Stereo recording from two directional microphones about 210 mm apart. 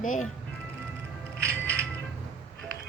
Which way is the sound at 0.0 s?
40° left (ahead or behind).